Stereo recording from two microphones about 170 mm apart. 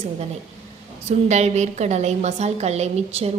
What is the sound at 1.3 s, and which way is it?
Speech, 40° right (ahead or behind).